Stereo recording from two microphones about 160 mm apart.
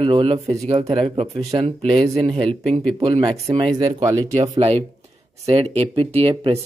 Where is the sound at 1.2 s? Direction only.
20° right (ahead or behind).